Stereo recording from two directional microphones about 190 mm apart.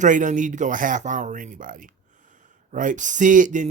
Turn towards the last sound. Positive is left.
turn(degrees=-40)  # may be behind; listen again after turning